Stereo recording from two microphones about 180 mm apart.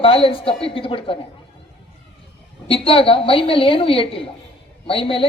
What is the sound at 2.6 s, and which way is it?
A woman's voice, 30° left (ahead or behind).